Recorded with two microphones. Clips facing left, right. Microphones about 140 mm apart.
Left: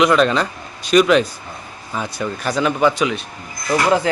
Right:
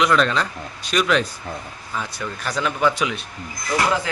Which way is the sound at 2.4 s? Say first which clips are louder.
Left 5 dB; 5° left (ahead or behind).